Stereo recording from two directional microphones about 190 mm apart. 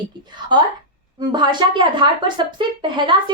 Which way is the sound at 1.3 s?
25° right (ahead or behind).